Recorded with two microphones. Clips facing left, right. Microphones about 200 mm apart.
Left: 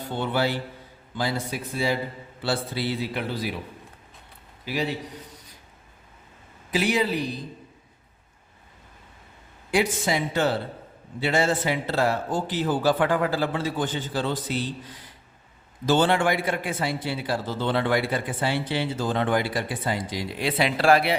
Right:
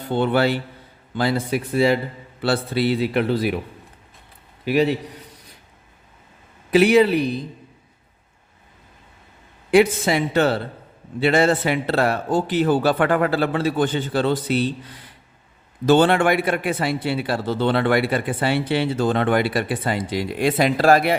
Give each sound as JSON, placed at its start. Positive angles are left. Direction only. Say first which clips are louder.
{"t": 0.1, "sound": "a man's voice", "louder": "right 7 dB", "side_deg": -65}
{"t": 4.6, "sound": "a man's voice", "louder": "right 9 dB", "side_deg": -65}
{"t": 6.7, "sound": "a man's voice", "louder": "right 10 dB", "side_deg": -65}
{"t": 9.7, "sound": "a man's voice", "louder": "right 8 dB", "side_deg": -65}